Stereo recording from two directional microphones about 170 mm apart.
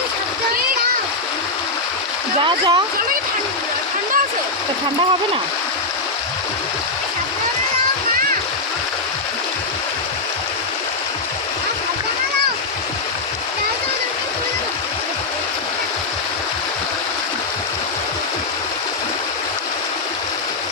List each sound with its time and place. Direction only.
2.4 s speech: 25° right (ahead or behind)